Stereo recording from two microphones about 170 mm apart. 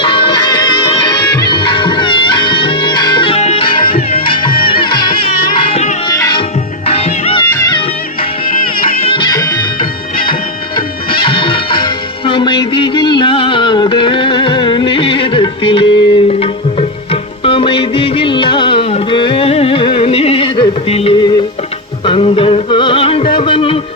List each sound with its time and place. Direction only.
0.0 s music: 30° left (ahead or behind)
6.1 s music: 25° left (ahead or behind)
6.8 s music: 35° left (ahead or behind)
9.0 s music: 25° left (ahead or behind)
11.1 s music: 30° left (ahead or behind)